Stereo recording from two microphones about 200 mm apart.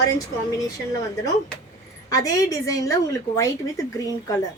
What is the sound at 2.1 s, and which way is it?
A woman's voice, 15° left (ahead or behind).